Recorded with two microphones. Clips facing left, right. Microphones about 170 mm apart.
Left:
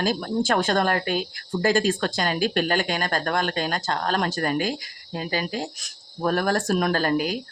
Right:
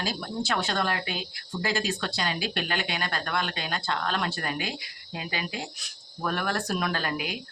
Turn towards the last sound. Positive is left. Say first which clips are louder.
# left 8 dB
turn(degrees=40)  # may be behind; listen again after turning